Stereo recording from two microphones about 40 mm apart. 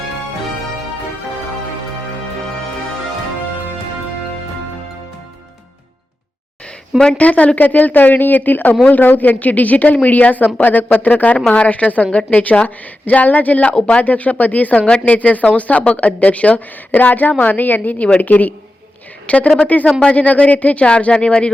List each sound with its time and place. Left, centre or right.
7.2 s speech: left
11.5 s speech: left
19.3 s speech: left